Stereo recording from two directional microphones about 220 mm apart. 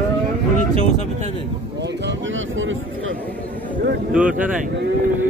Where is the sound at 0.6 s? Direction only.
35° left (ahead or behind).